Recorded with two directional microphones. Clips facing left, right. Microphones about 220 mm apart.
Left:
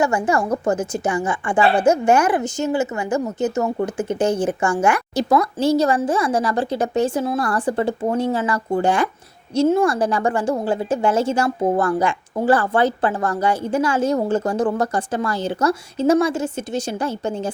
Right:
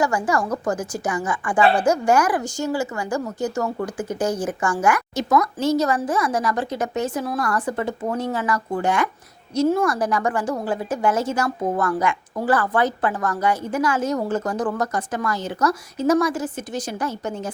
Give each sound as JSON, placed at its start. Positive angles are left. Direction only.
{"t": 0.0, "sound": "a woman's voice", "side_deg": 25}